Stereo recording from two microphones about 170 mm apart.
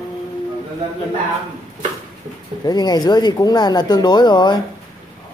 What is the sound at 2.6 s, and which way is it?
Speech, 25° left (ahead or behind).